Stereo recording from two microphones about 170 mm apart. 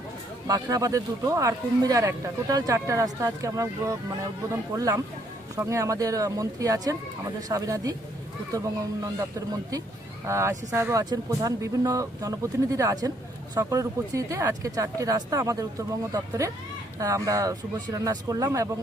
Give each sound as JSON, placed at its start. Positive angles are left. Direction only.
{"t": 0.4, "sound": "a man's voice", "side_deg": -20}
{"t": 10.2, "sound": "a man's voice", "side_deg": -15}